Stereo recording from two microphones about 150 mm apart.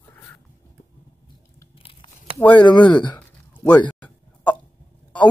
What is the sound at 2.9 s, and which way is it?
Speech, 30° left (ahead or behind).